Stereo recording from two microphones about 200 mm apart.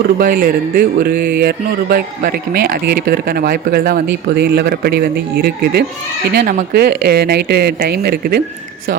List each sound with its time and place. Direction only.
0.2 s speech: 45° right (ahead or behind)
6.3 s speech: 40° right (ahead or behind)
6.8 s speech: 55° right (ahead or behind)